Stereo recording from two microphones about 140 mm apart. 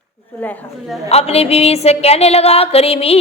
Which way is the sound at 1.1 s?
45° left (ahead or behind).